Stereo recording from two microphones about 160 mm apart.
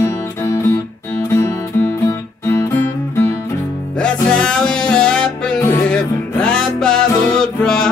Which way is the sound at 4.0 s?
5° left (ahead or behind).